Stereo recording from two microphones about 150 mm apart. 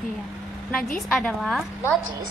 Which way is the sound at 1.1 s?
Centre (ahead or behind).